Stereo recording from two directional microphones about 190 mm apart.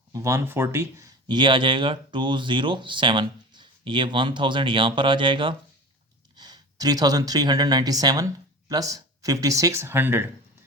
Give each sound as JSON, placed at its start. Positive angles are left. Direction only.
{"t": 0.1, "sound": "speech", "side_deg": -15}